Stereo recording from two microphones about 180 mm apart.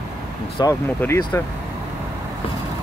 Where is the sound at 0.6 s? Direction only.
20° left (ahead or behind).